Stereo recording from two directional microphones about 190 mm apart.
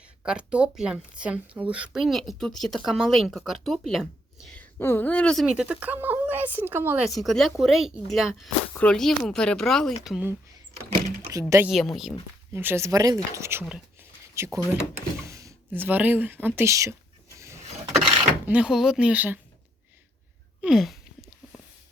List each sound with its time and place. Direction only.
0.2 s speech: 5° right (ahead or behind)
7.1 s speech: centre (ahead or behind)
11.3 s speech: 15° right (ahead or behind)
11.7 s speech: centre (ahead or behind)
12.5 s speech: 15° right (ahead or behind)
17.3 s a sound: 15° right (ahead or behind)
18.4 s speech: 5° right (ahead or behind)
20.6 s a sound: centre (ahead or behind)